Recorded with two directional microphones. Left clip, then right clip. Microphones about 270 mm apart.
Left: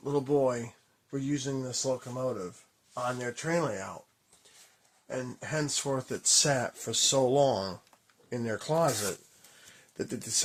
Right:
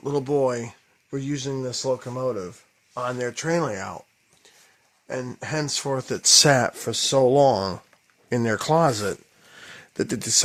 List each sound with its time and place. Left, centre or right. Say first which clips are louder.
0.0 s speech: right 5 dB; right
5.0 s speech: right 6 dB; right
9.6 s a sound: right 10 dB; right